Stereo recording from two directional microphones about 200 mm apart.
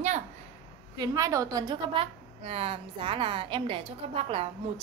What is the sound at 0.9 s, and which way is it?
A woman's voice, 20° right (ahead or behind).